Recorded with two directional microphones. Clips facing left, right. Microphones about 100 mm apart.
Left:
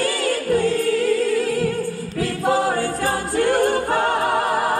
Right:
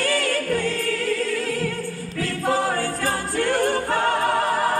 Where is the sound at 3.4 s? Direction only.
20° left (ahead or behind).